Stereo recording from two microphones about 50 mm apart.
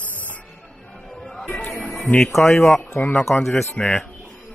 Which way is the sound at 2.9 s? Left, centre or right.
Left.